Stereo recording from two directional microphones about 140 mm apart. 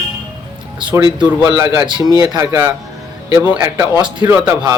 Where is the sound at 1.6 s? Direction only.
20° right (ahead or behind).